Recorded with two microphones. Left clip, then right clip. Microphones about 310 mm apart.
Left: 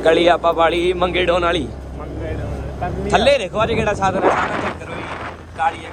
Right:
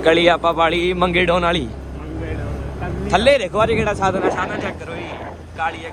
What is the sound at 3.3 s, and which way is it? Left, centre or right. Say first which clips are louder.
Speech: right 1 dB; centre.